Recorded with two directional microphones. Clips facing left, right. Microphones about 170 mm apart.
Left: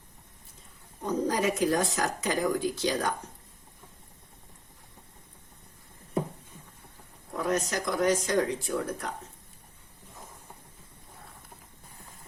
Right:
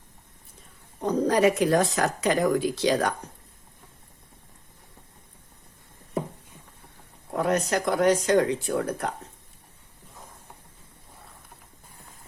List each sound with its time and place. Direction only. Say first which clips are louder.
1.0 s speech: right 6 dB; 70° right (ahead or behind)
7.3 s speech: right 5 dB; 65° right (ahead or behind)